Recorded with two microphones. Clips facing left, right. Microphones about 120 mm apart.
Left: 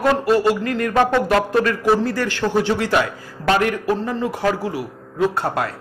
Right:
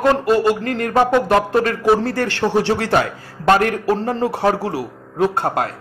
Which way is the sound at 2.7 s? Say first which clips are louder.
Right 1 dB; 60° right (ahead or behind).